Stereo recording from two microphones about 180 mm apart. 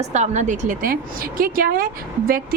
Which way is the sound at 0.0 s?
40° right (ahead or behind).